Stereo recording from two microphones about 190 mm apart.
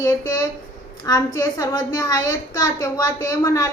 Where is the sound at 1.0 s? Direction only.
20° left (ahead or behind).